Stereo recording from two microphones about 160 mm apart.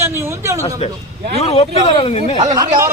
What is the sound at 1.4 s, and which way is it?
Speech, 40° left (ahead or behind).